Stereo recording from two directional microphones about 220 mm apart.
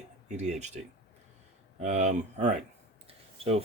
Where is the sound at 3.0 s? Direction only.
25° right (ahead or behind).